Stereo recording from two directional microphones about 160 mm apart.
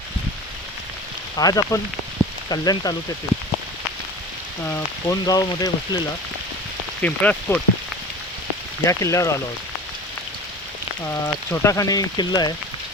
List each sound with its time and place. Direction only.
1.4 s speech: 25° left (ahead or behind)
4.6 s speech: 15° left (ahead or behind)
7.0 s speech: 10° left (ahead or behind)
8.8 s speech: 20° left (ahead or behind)
11.0 s speech: 20° left (ahead or behind)